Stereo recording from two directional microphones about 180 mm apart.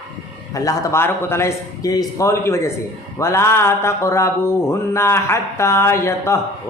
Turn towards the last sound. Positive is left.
turn(degrees=15)  # may be behind; listen again after turning